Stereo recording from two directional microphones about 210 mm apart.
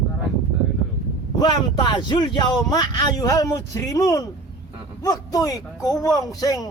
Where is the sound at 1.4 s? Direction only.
20° left (ahead or behind).